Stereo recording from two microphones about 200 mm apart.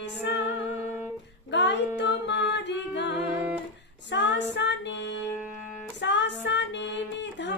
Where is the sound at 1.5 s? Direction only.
60° left (ahead or behind).